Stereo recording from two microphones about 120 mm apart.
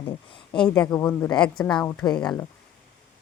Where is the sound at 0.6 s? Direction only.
10° left (ahead or behind).